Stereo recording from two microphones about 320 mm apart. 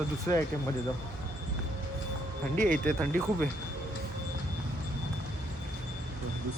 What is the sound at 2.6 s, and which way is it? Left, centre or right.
Speech, right.